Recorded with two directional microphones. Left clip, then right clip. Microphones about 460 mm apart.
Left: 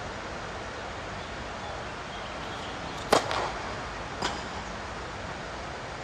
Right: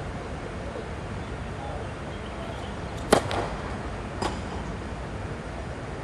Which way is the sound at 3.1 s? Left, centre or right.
Centre.